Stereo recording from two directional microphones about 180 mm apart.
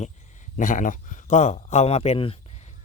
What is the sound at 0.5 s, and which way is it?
Speech, 45° left (ahead or behind).